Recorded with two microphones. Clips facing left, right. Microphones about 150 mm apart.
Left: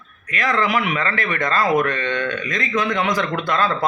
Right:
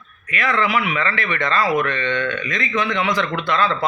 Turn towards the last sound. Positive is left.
turn(degrees=45)  # may be behind; listen again after turning